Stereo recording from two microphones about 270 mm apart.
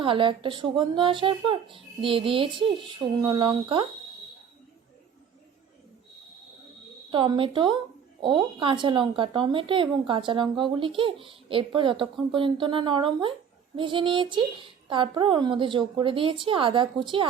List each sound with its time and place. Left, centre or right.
0.0 s speech: centre
7.1 s a woman's voice: centre